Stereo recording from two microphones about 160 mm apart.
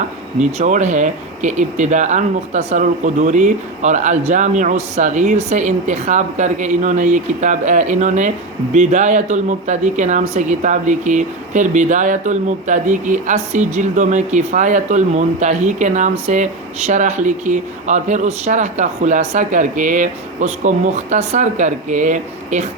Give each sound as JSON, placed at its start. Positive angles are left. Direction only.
{"t": 0.3, "sound": "speech", "side_deg": -50}